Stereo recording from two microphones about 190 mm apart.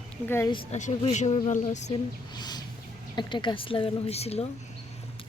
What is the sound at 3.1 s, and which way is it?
Speech, 25° left (ahead or behind).